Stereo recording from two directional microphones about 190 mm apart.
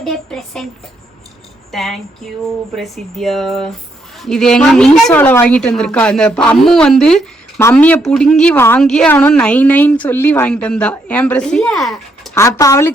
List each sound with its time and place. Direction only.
0.0 s a woman's voice: centre (ahead or behind)
1.7 s a woman's voice: centre (ahead or behind)
12.3 s a woman's voice: 15° left (ahead or behind)